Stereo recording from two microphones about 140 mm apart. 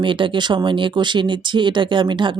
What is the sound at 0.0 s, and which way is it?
Speech, 35° right (ahead or behind).